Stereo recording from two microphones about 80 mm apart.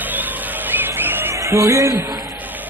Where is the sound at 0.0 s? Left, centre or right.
Right.